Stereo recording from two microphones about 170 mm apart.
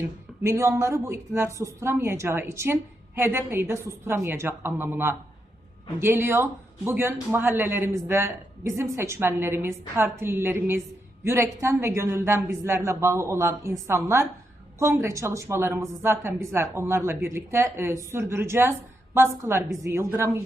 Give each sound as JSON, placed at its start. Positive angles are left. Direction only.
{"t": 0.4, "sound": "a man's voice", "side_deg": -15}